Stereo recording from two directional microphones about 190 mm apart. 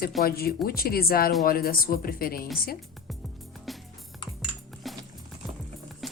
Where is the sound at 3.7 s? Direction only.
Centre (ahead or behind).